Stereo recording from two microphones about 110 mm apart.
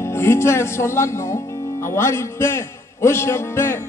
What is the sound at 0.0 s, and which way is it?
Speech, 25° left (ahead or behind).